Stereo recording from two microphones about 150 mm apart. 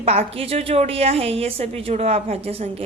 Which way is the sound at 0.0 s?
45° right (ahead or behind).